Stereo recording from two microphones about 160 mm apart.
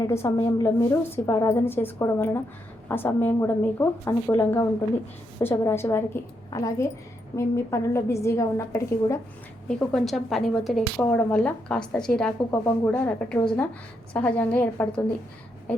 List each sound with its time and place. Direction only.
0.0 s a woman's voice: 15° left (ahead or behind)
9.6 s a woman's voice: 5° left (ahead or behind)